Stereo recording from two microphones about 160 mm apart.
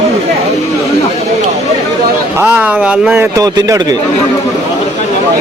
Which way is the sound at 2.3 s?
10° right (ahead or behind).